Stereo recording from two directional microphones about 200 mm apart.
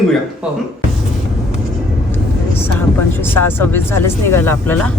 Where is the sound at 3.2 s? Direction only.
10° left (ahead or behind).